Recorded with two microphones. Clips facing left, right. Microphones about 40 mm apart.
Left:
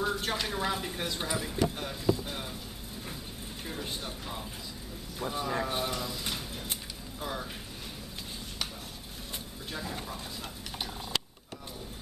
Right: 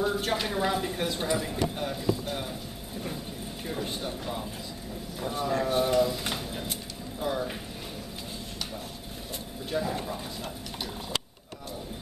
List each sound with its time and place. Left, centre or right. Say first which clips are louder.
0.0 s a woman's voice: right 3 dB; centre
3.6 s a woman's voice: right 5 dB; centre
5.9 s speech: right 11 dB; centre
6.2 s a sound: right 4 dB; centre
7.2 s speech: right 7 dB; centre
9.7 s speech: right 8 dB; centre